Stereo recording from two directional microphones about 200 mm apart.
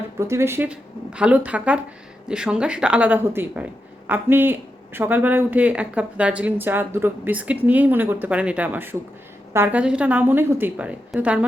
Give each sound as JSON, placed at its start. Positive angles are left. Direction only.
{"t": 0.2, "sound": "a woman's voice", "side_deg": -15}